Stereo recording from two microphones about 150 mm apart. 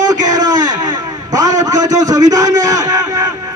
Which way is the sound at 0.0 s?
25° right (ahead or behind).